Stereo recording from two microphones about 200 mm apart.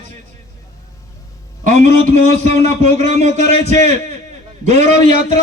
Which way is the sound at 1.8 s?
35° right (ahead or behind).